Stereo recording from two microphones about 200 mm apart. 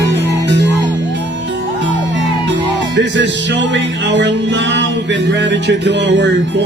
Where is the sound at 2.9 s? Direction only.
60° right (ahead or behind).